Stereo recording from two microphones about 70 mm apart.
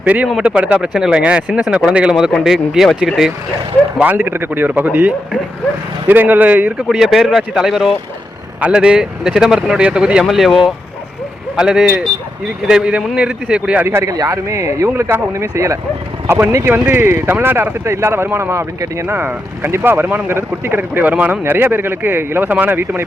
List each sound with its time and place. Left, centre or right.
0.0 s speech: right; by 3.3 s centre
4.0 s a man's voice: right
6.8 s speech: centre
10.2 s speech: centre
13.8 s speech: right
16.6 s a man's voice: right
17.8 s speech: right